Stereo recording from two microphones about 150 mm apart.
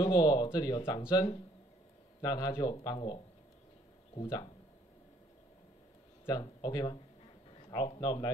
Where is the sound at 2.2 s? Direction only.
25° left (ahead or behind).